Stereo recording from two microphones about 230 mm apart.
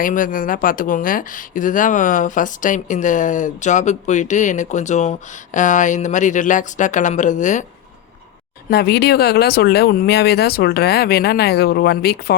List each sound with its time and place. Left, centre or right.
0.0 s speech: left
8.7 s speech: left